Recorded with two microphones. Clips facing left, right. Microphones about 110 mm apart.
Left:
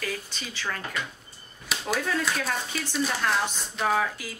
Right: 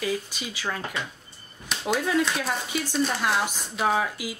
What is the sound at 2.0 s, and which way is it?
Speech, 10° right (ahead or behind).